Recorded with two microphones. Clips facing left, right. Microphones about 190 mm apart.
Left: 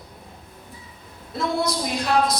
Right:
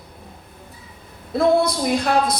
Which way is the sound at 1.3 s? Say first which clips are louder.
Right 7 dB; 55° right (ahead or behind).